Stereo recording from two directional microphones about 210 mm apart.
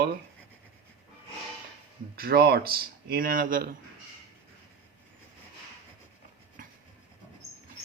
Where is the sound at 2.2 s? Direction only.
45° right (ahead or behind).